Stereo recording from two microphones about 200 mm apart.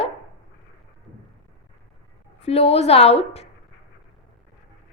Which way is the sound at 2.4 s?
30° left (ahead or behind).